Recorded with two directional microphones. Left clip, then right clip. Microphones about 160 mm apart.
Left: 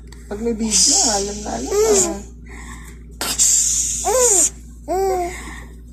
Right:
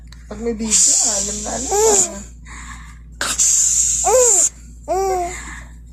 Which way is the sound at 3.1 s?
5° right (ahead or behind).